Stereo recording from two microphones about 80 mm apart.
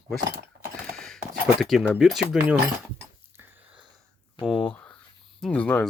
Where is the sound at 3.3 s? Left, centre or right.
Right.